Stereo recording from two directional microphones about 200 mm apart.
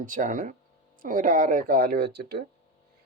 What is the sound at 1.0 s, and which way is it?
Speech, 40° right (ahead or behind).